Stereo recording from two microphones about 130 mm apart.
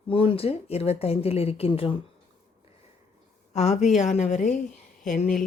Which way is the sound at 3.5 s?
60° left (ahead or behind).